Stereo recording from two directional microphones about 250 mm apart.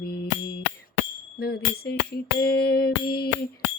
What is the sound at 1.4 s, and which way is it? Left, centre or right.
Music, left.